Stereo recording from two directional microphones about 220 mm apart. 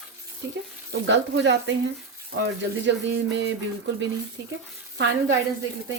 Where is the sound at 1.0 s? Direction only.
55° right (ahead or behind).